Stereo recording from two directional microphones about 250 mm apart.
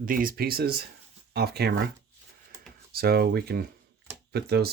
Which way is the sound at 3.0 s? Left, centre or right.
Right.